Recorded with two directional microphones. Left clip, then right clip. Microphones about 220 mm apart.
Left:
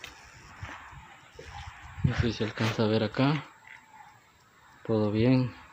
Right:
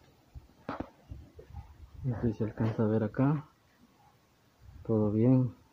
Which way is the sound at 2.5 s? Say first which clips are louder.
Left 5 dB; 5° left (ahead or behind).